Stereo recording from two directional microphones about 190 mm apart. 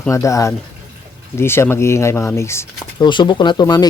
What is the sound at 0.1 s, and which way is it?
Speech, 15° left (ahead or behind).